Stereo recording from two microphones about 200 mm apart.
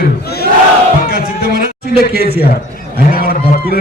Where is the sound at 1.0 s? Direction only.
50° left (ahead or behind).